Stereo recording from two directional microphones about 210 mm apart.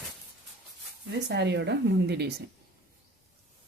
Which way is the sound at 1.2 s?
55° right (ahead or behind).